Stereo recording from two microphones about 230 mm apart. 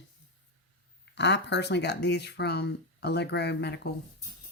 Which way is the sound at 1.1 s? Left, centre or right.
Left.